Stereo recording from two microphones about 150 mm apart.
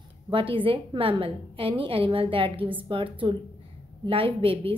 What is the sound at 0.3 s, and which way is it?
A woman's voice, 35° right (ahead or behind).